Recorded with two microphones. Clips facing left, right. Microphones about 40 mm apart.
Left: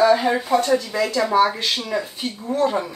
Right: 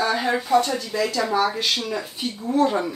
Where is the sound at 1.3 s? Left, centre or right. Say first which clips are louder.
Left 6 dB; left.